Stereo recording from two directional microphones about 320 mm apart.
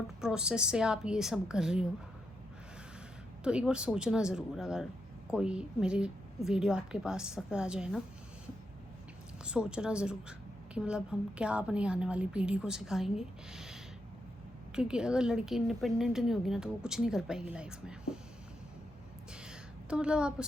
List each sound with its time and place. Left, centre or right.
0.2 s speech: centre
3.4 s speech: centre
9.4 s speech: centre
14.8 s speech: centre
19.5 s a sound: centre